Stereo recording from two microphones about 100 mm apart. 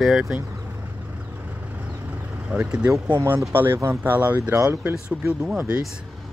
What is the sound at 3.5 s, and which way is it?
Speech, 20° right (ahead or behind).